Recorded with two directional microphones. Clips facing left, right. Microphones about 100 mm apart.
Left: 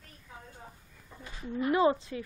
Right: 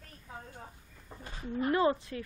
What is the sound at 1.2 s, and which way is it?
Speech, 40° right (ahead or behind).